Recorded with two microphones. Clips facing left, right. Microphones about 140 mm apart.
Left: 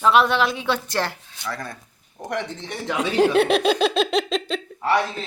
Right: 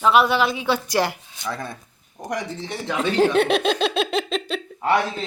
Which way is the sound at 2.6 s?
Centre (ahead or behind).